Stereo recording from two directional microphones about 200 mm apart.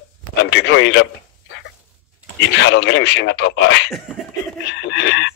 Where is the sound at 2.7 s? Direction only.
60° left (ahead or behind).